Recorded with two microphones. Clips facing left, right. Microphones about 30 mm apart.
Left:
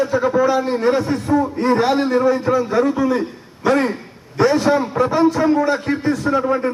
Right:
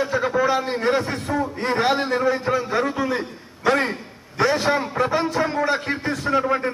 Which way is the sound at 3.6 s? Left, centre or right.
Centre.